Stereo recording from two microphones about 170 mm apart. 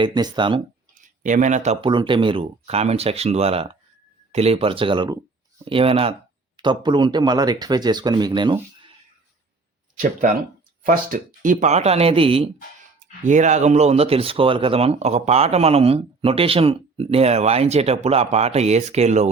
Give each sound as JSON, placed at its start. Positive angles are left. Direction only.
{"t": 0.0, "sound": "speech", "side_deg": -25}
{"t": 1.0, "sound": "speech", "side_deg": -50}
{"t": 1.8, "sound": "speech", "side_deg": -30}
{"t": 10.8, "sound": "speech", "side_deg": -50}
{"t": 13.0, "sound": "speech", "side_deg": -45}